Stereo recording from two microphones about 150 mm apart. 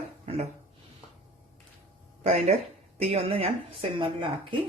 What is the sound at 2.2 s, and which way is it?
Speech, 50° right (ahead or behind).